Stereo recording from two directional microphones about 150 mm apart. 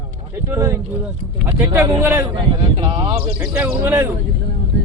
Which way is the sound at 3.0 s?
40° right (ahead or behind).